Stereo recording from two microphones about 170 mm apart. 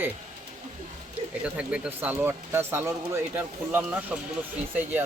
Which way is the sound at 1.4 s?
5° right (ahead or behind).